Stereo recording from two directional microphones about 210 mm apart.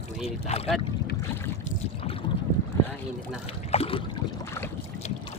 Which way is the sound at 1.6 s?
25° left (ahead or behind).